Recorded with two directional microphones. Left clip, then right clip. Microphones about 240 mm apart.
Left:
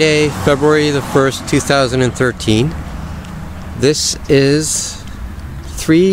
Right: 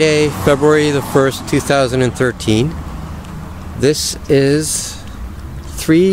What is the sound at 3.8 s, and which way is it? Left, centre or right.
Speech, centre.